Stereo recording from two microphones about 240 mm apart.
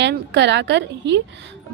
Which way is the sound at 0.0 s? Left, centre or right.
Right.